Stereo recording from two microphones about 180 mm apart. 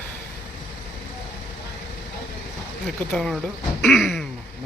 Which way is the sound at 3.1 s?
Centre (ahead or behind).